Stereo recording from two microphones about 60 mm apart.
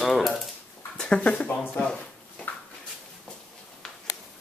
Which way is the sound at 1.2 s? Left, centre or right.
Left.